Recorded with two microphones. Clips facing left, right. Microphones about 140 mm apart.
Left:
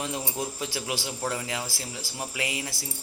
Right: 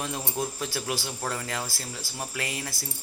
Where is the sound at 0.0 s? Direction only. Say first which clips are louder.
Even; 15° left (ahead or behind).